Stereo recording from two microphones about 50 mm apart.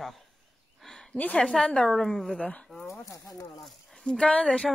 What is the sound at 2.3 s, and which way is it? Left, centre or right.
Speech, left.